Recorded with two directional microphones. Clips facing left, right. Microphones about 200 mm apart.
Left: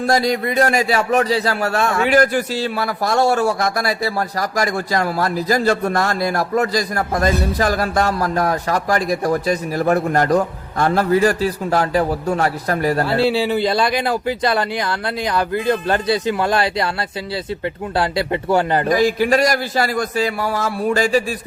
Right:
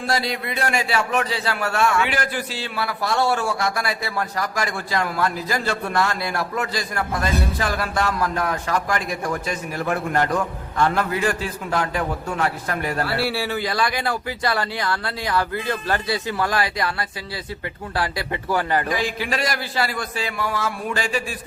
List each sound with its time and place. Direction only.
0.1 s a man's voice: 45° left (ahead or behind)
13.1 s speech: 20° left (ahead or behind)
17.9 s speech: 25° left (ahead or behind)
18.9 s a man's voice: 40° left (ahead or behind)